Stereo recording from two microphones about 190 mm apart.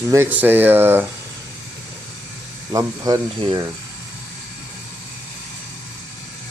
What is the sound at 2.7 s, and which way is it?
Speech, 20° right (ahead or behind).